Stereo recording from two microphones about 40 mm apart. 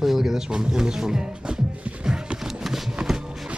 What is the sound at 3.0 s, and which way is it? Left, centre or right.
Music, centre.